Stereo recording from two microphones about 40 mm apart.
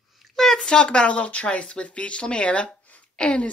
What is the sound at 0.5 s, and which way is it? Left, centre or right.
Speech, left.